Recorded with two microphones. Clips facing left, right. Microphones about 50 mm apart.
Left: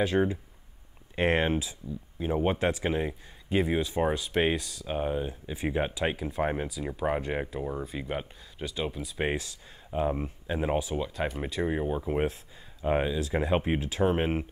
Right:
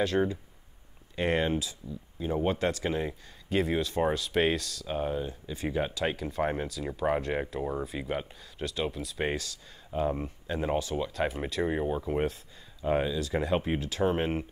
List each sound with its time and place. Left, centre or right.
0.0 s speech: centre
1.1 s speech: left; by 9.3 s centre
9.3 s speech: centre
12.0 s speech: centre